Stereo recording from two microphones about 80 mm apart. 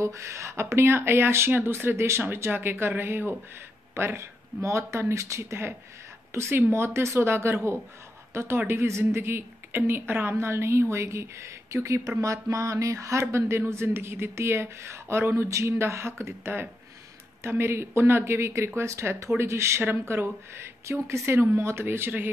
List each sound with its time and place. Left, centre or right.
0.0 s speech: right